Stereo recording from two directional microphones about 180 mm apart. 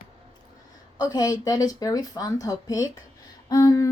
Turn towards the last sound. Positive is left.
turn(degrees=20)  # may be behind; listen again after turning